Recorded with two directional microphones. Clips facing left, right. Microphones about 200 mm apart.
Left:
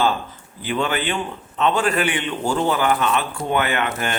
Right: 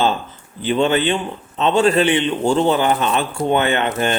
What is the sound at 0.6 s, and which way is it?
A man's voice, 25° right (ahead or behind).